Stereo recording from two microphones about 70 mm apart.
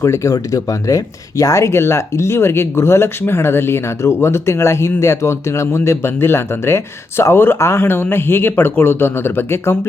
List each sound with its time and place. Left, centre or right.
0.0 s speech: left